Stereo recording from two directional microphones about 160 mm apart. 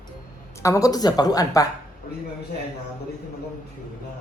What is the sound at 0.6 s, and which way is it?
Speech, 20° left (ahead or behind).